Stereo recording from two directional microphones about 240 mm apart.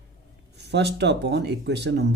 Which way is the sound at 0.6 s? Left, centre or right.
Right.